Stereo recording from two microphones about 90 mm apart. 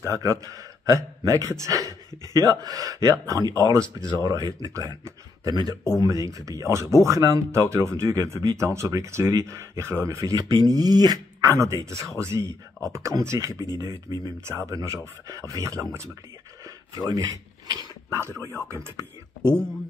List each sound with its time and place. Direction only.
0.0 s speech: 35° right (ahead or behind)
4.7 s speech: 35° right (ahead or behind)
5.5 s speech: 50° right (ahead or behind)
6.0 s speech: 35° right (ahead or behind)
11.5 s speech: 30° right (ahead or behind)
16.6 s a sound: 45° right (ahead or behind)